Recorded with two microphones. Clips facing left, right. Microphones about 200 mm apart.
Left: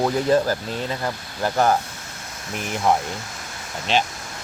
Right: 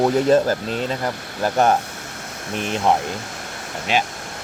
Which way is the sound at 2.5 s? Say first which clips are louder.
Right 2 dB; 20° right (ahead or behind).